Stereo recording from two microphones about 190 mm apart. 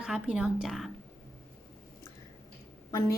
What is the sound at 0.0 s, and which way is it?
Speech, 5° right (ahead or behind).